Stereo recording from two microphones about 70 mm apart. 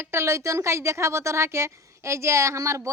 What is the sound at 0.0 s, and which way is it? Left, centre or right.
Speech, right.